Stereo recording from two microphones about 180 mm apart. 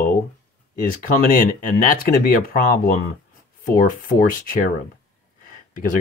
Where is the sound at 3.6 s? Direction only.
50° left (ahead or behind).